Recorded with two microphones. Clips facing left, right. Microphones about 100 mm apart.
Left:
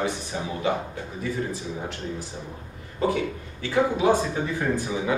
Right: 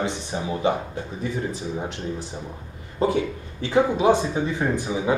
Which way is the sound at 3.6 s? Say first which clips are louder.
Right 3 dB; 20° right (ahead or behind).